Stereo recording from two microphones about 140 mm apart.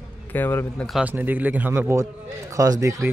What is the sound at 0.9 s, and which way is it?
A man's voice, 10° right (ahead or behind).